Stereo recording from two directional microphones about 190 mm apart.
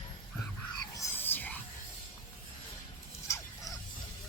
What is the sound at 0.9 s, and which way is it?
Whispering, 15° left (ahead or behind).